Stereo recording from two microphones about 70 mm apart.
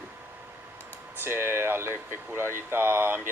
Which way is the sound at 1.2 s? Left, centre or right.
Right.